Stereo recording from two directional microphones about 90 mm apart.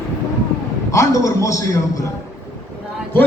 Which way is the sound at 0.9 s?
35° left (ahead or behind).